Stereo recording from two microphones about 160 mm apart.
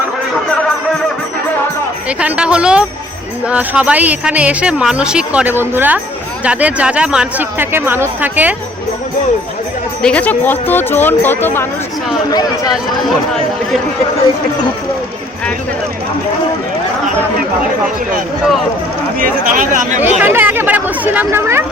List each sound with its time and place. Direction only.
2.0 s a woman's voice: 5° right (ahead or behind)
10.0 s speech: 5° left (ahead or behind)
12.3 s speech: 25° left (ahead or behind)
12.7 s speech: centre (ahead or behind)
19.2 s speech: 55° right (ahead or behind)
20.0 s a woman's voice: 15° right (ahead or behind)